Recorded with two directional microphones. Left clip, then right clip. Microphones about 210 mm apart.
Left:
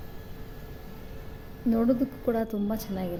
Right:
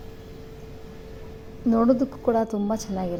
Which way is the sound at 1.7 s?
10° right (ahead or behind).